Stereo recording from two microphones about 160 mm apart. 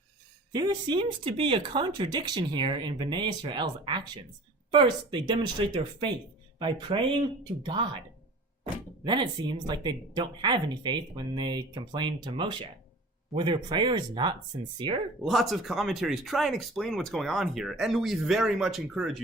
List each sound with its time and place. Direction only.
0.5 s speech: 25° right (ahead or behind)
0.9 s speech: 35° right (ahead or behind)
9.0 s speech: 30° right (ahead or behind)
15.2 s speech: centre (ahead or behind)